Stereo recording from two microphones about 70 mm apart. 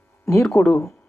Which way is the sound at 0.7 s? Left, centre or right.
Left.